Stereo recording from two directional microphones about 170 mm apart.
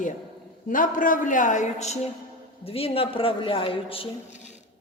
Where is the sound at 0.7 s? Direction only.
50° left (ahead or behind).